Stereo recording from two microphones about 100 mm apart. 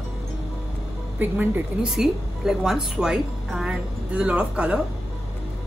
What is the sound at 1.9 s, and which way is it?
A woman's voice, 5° right (ahead or behind).